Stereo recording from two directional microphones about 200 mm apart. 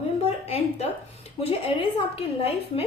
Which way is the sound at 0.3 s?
30° left (ahead or behind).